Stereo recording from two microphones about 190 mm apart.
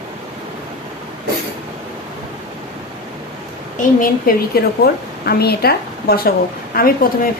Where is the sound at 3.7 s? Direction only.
50° left (ahead or behind).